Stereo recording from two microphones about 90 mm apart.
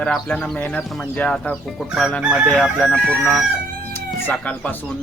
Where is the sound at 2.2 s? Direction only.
10° right (ahead or behind).